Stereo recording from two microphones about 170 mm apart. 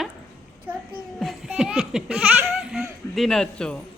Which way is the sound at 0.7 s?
10° right (ahead or behind).